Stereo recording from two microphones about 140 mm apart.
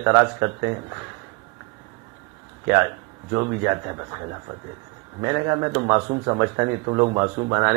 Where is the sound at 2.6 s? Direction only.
20° right (ahead or behind).